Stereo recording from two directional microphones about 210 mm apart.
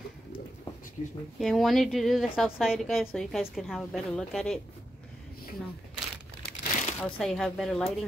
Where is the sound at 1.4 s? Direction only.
Centre (ahead or behind).